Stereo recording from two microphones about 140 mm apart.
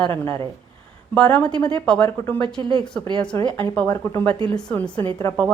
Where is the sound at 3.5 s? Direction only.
10° left (ahead or behind).